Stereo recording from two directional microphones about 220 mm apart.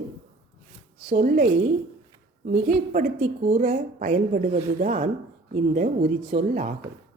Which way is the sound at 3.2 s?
25° right (ahead or behind).